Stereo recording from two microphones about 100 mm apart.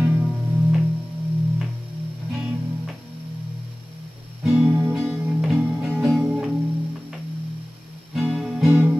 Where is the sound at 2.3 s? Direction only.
5° right (ahead or behind).